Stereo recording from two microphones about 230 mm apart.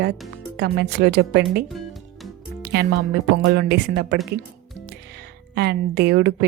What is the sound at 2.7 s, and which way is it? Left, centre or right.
A woman's voice, right.